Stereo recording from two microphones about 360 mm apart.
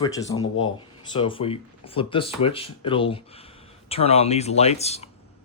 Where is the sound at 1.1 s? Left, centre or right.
Centre.